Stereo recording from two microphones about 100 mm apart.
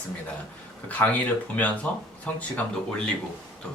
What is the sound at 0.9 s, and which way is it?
Speech, 15° left (ahead or behind).